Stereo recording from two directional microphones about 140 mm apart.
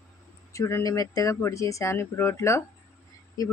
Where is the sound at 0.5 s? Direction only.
20° left (ahead or behind).